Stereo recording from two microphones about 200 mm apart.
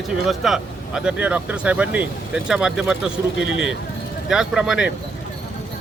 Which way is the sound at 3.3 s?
70° left (ahead or behind).